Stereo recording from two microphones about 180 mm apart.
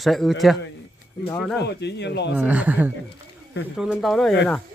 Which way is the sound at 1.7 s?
70° left (ahead or behind).